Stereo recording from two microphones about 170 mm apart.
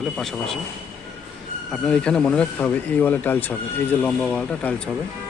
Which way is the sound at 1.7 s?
5° left (ahead or behind).